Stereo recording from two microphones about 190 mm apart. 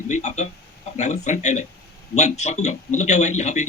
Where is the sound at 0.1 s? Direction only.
40° left (ahead or behind).